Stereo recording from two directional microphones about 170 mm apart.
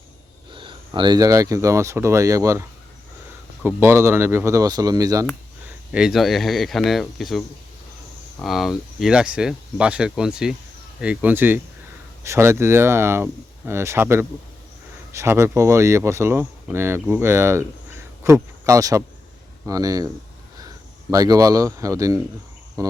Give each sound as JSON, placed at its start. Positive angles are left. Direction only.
{"t": 0.5, "sound": "speech", "side_deg": -30}
{"t": 5.9, "sound": "speech", "side_deg": -5}
{"t": 21.1, "sound": "speech", "side_deg": -20}
{"t": 22.8, "sound": "cricket", "side_deg": -20}